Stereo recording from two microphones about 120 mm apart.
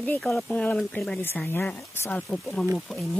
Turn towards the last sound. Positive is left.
turn(degrees=0)  # may be behind; listen again after turning